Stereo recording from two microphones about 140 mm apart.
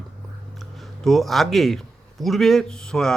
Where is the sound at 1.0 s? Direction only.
Centre (ahead or behind).